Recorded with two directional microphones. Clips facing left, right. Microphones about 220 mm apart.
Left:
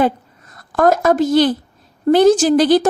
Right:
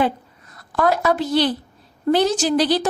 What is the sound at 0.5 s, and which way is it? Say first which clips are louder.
A woman's voice: left 5 dB; 45° left (ahead or behind).